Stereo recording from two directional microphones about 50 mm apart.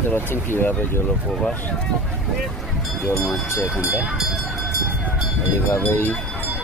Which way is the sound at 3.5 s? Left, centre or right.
Left.